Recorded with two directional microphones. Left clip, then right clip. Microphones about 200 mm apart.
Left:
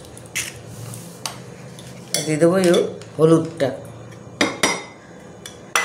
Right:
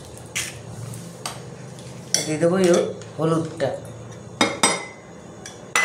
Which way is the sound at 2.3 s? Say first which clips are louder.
Left 3 dB; 60° left (ahead or behind).